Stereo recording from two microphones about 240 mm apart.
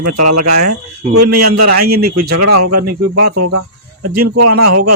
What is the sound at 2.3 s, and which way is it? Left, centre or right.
Speech, right.